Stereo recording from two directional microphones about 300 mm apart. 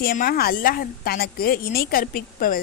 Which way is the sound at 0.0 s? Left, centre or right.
Left.